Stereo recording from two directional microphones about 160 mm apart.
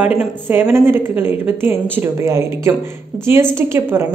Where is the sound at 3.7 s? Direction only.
15° right (ahead or behind).